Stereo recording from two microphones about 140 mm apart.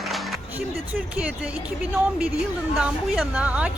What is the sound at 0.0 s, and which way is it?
Music, centre (ahead or behind).